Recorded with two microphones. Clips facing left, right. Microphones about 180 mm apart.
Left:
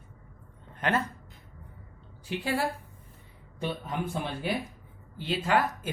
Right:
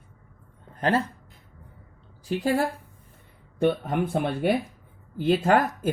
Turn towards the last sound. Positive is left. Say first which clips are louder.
# right 5 dB
turn(degrees=-50)  # may be behind; listen again after turning